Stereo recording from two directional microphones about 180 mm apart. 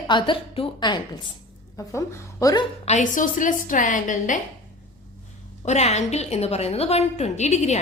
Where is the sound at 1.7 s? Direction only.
15° left (ahead or behind).